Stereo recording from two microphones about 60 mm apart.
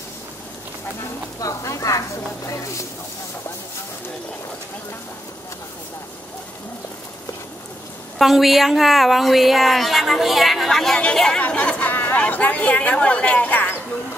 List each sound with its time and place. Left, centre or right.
1.4 s speech: left
8.2 s speech: centre
11.4 s speech: left